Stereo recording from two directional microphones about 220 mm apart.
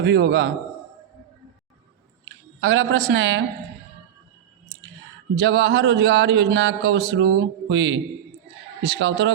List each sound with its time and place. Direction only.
0.0 s speech: 50° right (ahead or behind)
2.6 s speech: 65° right (ahead or behind)
5.3 s speech: 55° right (ahead or behind)